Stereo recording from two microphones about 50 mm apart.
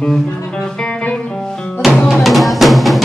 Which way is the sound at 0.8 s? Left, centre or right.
Centre.